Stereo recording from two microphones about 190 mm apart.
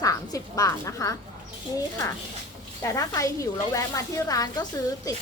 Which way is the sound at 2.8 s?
15° left (ahead or behind).